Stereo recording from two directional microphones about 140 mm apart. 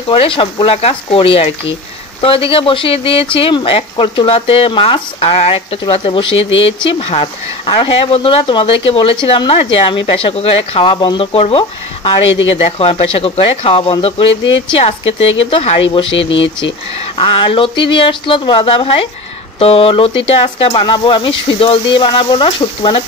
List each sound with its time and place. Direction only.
0.1 s speech: 40° left (ahead or behind)
17.2 s speech: 40° left (ahead or behind)